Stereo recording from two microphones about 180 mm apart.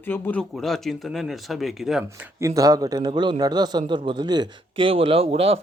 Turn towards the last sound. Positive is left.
turn(degrees=-35)  # may be behind; listen again after turning